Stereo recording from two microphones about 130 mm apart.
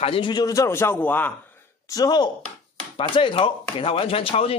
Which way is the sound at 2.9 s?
40° left (ahead or behind).